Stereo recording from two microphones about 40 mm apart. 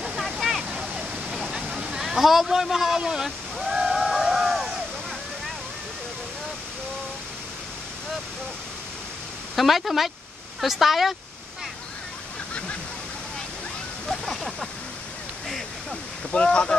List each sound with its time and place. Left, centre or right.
0.4 s waterfall: centre
0.7 s waterfall: centre
1.5 s a sound: centre
2.0 s speech: centre
3.3 s waves: centre
9.6 s speech: centre
14.0 s waterfall: centre
16.3 s speech: left